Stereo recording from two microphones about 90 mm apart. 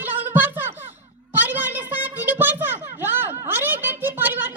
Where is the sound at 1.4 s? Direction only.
20° right (ahead or behind).